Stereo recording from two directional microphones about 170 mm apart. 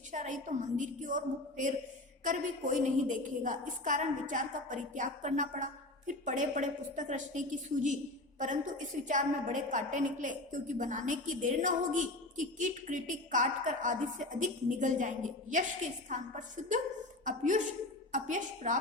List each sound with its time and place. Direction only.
0.1 s a woman's voice: 45° right (ahead or behind)